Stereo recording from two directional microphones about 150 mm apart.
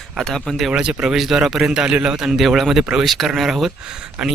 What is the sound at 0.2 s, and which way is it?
A man's voice, 5° left (ahead or behind).